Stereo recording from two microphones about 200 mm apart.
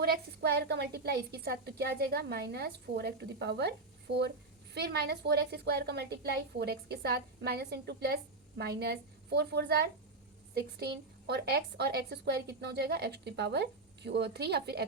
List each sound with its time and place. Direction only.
0.0 s a woman's voice: 50° right (ahead or behind)